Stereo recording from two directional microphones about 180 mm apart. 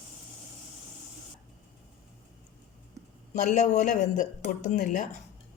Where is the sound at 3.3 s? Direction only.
40° left (ahead or behind).